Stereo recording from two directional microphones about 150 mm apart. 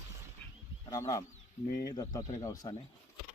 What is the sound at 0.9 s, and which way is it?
Speech, 25° left (ahead or behind).